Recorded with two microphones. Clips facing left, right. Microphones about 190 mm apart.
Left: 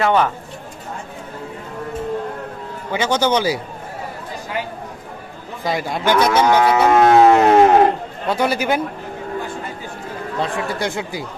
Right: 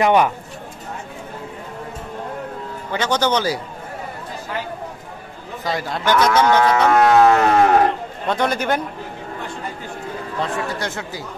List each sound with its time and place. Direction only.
0.0 s speech: 15° right (ahead or behind)
2.9 s cattle: 10° left (ahead or behind)
5.6 s cattle: 15° left (ahead or behind)
7.1 s a sound: 20° left (ahead or behind)
8.3 s cattle: 5° left (ahead or behind)
10.4 s cattle: 15° left (ahead or behind)